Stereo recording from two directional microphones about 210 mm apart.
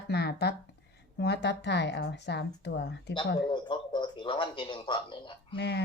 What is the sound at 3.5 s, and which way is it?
Speech, 20° left (ahead or behind).